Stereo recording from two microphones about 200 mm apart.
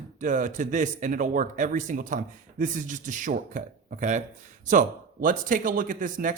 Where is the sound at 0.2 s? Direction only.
40° right (ahead or behind).